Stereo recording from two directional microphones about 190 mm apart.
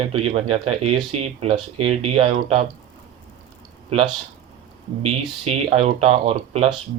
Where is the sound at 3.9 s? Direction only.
30° right (ahead or behind).